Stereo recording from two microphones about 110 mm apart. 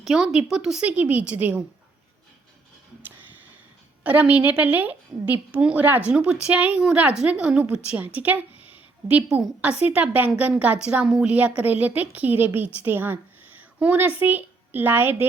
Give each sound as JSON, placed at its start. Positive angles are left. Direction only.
{"t": 0.0, "sound": "a woman's voice", "side_deg": -5}
{"t": 4.0, "sound": "a woman's voice", "side_deg": -15}